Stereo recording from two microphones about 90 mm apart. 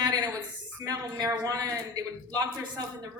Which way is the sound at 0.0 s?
50° right (ahead or behind).